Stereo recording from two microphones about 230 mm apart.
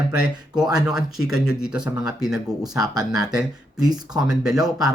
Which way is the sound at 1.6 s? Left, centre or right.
Centre.